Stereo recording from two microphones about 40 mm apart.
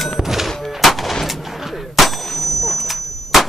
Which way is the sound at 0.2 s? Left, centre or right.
Centre.